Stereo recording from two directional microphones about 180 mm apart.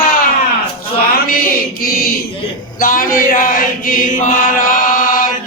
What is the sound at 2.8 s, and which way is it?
Chant, 50° left (ahead or behind).